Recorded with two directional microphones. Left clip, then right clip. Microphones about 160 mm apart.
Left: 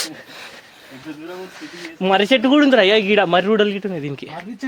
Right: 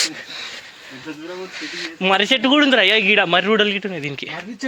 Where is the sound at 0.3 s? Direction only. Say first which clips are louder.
Right 5 dB; 90° left.